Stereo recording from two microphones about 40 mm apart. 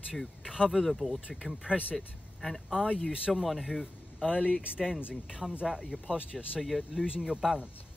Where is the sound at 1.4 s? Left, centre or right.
Right.